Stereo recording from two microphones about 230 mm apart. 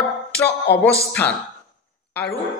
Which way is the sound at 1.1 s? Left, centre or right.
Centre.